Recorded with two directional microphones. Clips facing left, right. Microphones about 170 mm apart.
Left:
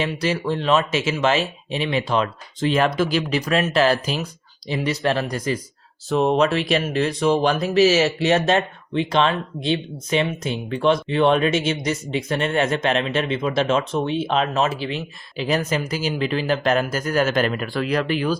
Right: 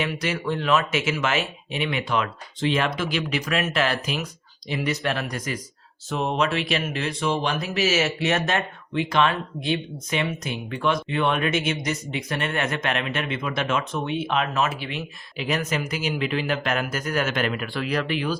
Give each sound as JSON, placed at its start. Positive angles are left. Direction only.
{"t": 0.0, "sound": "speech", "side_deg": 30}